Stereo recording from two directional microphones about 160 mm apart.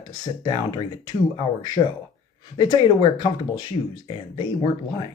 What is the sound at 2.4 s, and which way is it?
Speech, 30° left (ahead or behind).